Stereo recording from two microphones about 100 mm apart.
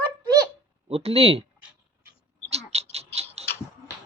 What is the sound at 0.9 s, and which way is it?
Speech, 85° right.